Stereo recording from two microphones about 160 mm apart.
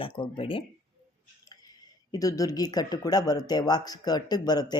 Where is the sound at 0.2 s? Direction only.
30° left (ahead or behind).